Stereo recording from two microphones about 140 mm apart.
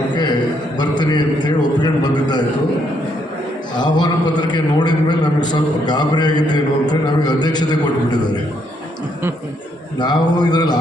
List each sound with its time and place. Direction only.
0.8 s a man's voice: 30° left (ahead or behind)
3.8 s a man's voice: 30° left (ahead or behind)
10.0 s a man's voice: 30° left (ahead or behind)